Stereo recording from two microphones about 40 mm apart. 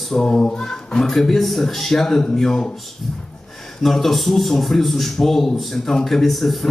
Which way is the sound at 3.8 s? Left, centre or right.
Centre.